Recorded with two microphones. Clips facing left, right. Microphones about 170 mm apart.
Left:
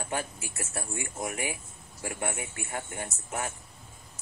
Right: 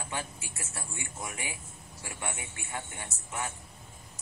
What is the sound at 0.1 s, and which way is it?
A man's voice, 45° left (ahead or behind).